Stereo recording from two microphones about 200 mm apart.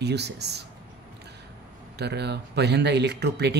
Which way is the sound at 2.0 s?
55° right (ahead or behind).